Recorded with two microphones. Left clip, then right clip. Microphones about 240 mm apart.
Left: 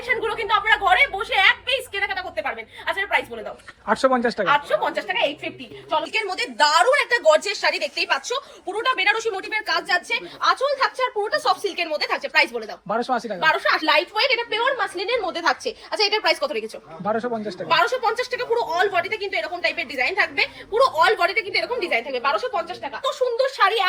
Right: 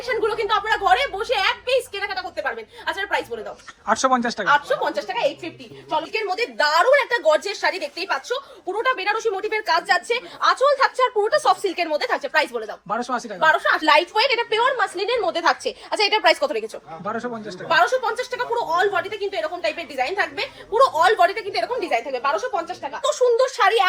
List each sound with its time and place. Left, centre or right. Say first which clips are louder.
0.1 s a sound: even; right
3.8 s a woman's voice: even; centre
12.9 s speech: left 2 dB; centre
13.8 s a woman's voice: right 2 dB; right
17.0 s speech: left 4 dB; centre
17.7 s a woman's voice: right 1 dB; right
23.0 s a woman's voice: right 4 dB; right